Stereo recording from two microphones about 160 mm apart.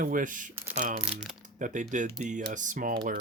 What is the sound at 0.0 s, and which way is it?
Speech, 55° right (ahead or behind).